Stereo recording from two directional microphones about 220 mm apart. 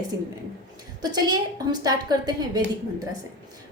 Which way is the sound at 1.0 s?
20° right (ahead or behind).